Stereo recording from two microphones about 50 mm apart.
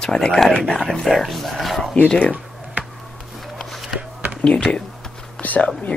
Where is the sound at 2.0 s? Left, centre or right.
Left.